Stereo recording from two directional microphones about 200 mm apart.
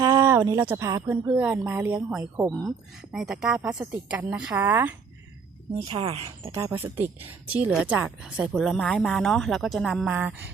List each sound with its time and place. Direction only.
0.0 s a woman's voice: 15° right (ahead or behind)
5.9 s speech: 30° right (ahead or behind)
6.7 s speech: 10° right (ahead or behind)